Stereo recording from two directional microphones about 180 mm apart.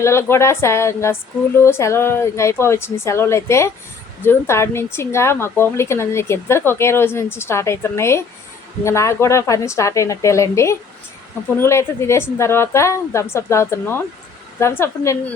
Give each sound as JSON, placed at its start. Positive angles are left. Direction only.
{"t": 0.0, "sound": "speech", "side_deg": 15}